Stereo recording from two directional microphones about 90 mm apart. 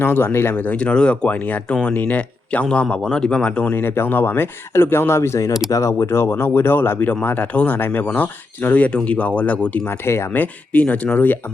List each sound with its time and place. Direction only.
0.0 s speech: 25° left (ahead or behind)